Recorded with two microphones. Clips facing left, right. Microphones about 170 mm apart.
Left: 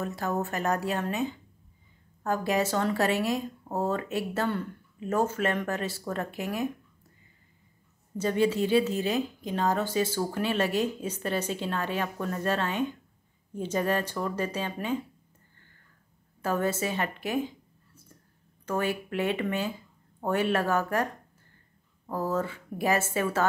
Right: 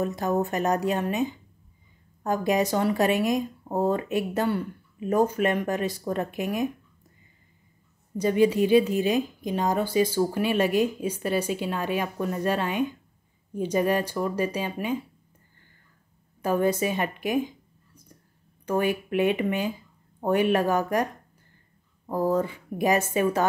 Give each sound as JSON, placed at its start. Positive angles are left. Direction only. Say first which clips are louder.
{"t": 0.0, "sound": "speech", "louder": "right 5 dB", "side_deg": -20}
{"t": 8.2, "sound": "speech", "louder": "right 4 dB", "side_deg": -15}
{"t": 16.3, "sound": "speech", "louder": "right 5 dB", "side_deg": -15}